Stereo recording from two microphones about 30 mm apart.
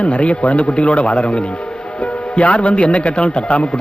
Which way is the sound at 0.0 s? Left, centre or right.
Left.